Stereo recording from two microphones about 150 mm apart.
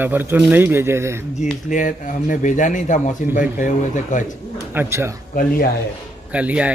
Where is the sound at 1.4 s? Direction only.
60° left (ahead or behind).